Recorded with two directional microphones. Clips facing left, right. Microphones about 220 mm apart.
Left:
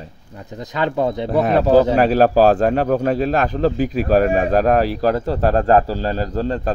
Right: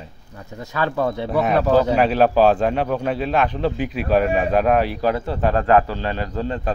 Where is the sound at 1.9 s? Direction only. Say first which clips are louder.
Left 2 dB; 40° left (ahead or behind).